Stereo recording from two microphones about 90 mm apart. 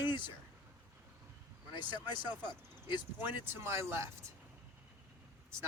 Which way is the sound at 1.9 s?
55° left (ahead or behind).